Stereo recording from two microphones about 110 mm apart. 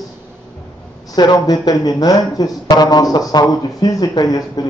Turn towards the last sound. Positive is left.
turn(degrees=35)  # may be behind; listen again after turning